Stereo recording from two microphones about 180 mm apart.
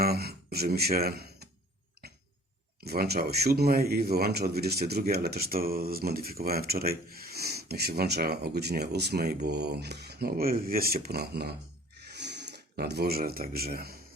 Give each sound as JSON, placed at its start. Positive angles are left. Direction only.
{"t": 0.0, "sound": "speech", "side_deg": -60}
{"t": 2.8, "sound": "speech", "side_deg": -60}
{"t": 12.1, "sound": "a sound", "side_deg": -70}